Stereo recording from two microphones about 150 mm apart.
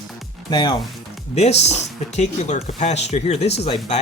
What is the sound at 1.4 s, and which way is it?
Speech, 45° left (ahead or behind).